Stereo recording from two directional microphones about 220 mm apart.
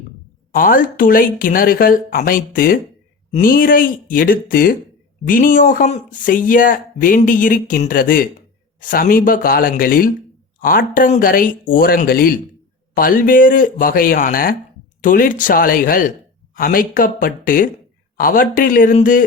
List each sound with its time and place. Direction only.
0.5 s speech: 40° left (ahead or behind)